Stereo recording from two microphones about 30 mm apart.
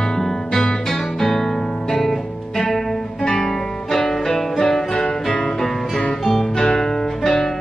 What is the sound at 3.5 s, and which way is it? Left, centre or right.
Music, centre.